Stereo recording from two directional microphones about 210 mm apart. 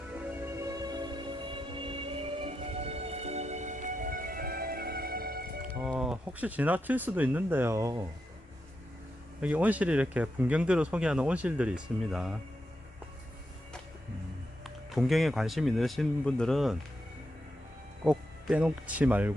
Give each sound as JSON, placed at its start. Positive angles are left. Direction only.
{"t": 0.3, "sound": "music", "side_deg": -15}
{"t": 5.8, "sound": "speech", "side_deg": -5}
{"t": 9.4, "sound": "speech", "side_deg": -5}
{"t": 14.6, "sound": "speech", "side_deg": 0}
{"t": 18.0, "sound": "speech", "side_deg": -5}